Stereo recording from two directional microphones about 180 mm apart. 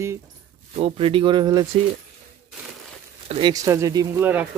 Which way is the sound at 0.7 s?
30° right (ahead or behind).